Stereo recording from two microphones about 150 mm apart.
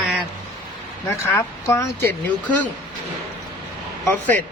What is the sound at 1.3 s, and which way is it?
Speech, 20° left (ahead or behind).